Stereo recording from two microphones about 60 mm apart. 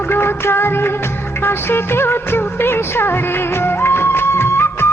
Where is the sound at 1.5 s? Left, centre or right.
Left.